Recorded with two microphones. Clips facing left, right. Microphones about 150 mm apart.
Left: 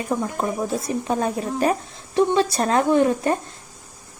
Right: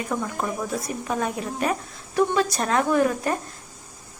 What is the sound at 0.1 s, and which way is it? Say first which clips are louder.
Speech: left 5 dB; 25° left (ahead or behind).